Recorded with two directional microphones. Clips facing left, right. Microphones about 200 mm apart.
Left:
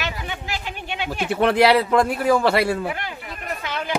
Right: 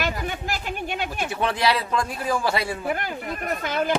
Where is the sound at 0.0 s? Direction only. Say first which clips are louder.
Right 3 dB; 45° right (ahead or behind).